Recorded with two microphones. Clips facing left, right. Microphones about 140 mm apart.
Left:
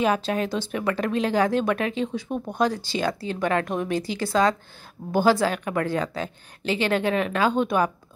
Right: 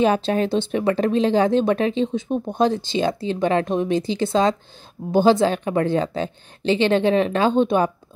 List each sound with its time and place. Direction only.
0.0 s a woman's voice: 30° right (ahead or behind)